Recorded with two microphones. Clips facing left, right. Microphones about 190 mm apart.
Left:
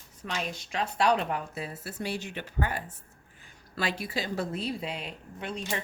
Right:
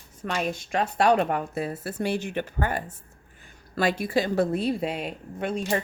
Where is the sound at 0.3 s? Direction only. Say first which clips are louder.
Right 7 dB; 50° right (ahead or behind).